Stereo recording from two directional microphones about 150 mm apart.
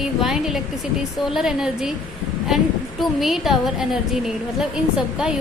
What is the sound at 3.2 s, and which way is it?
A woman's voice, centre (ahead or behind).